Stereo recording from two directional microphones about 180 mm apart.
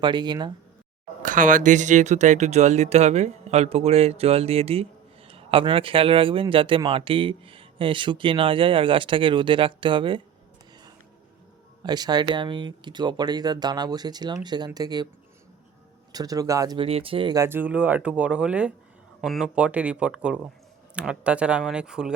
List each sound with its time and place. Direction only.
0.0 s speech: 25° right (ahead or behind)
1.2 s speech: 45° right (ahead or behind); by 10.2 s 25° right (ahead or behind)
11.8 s speech: 25° right (ahead or behind)
16.1 s speech: 20° right (ahead or behind); by 22.1 s 5° right (ahead or behind)